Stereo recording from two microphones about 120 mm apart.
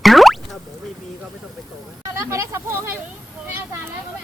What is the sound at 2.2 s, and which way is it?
Speech, 25° right (ahead or behind).